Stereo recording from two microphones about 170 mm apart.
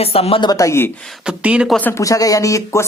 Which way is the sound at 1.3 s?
5° right (ahead or behind).